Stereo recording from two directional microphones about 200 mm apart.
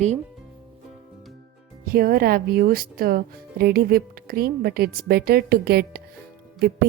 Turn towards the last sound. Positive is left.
turn(degrees=-50)  # may be behind; listen again after turning